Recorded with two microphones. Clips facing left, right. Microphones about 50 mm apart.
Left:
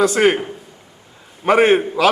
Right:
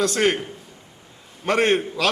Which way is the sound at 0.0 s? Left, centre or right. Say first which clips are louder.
Left 6 dB; centre.